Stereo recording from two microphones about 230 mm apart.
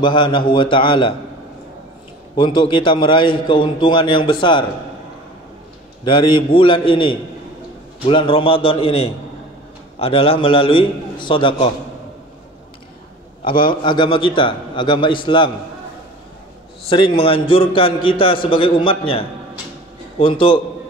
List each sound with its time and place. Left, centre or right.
0.0 s a man's voice: left
2.3 s a man's voice: left
6.0 s a man's voice: left
13.4 s a man's voice: left
16.9 s a man's voice: left